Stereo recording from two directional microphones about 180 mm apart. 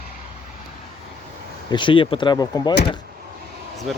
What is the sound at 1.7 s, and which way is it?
Speech, 25° left (ahead or behind).